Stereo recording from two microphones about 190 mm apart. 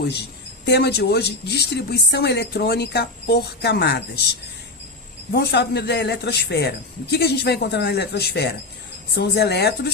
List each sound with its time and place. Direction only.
0.6 s a woman's voice: 60° left (ahead or behind)
5.3 s a woman's voice: 60° left (ahead or behind)